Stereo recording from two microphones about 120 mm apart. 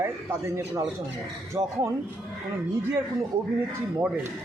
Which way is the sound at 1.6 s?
55° right (ahead or behind).